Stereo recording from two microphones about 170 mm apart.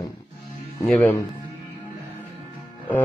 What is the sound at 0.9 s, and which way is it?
Speech, 5° left (ahead or behind).